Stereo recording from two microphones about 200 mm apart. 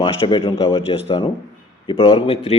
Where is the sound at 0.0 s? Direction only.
25° left (ahead or behind).